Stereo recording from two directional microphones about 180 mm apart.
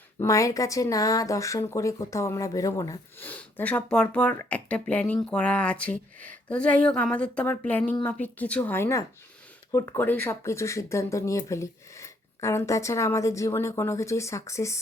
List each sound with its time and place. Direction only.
0.2 s speech: 15° left (ahead or behind)